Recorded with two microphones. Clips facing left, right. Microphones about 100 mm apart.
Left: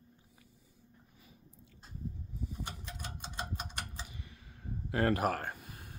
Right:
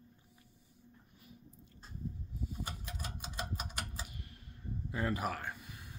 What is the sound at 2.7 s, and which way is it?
Typewriter, 5° right (ahead or behind).